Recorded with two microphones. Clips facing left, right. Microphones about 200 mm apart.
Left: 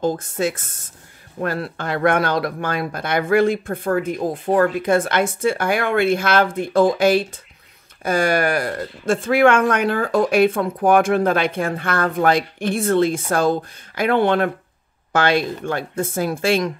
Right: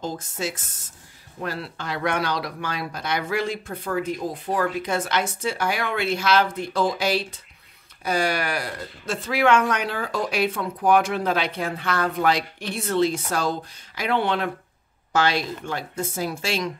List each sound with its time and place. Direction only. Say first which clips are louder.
0.0 s speech: left 8 dB; 55° left (ahead or behind)